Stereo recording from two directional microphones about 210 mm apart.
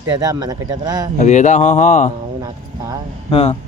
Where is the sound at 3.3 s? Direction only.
25° left (ahead or behind).